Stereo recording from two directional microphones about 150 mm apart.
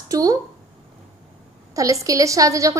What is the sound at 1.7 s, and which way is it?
A woman's voice, 20° right (ahead or behind).